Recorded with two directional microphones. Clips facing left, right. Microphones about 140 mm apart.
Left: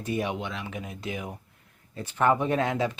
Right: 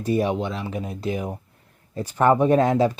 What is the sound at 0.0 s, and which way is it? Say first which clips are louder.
Speech: right 7 dB; 35° right (ahead or behind).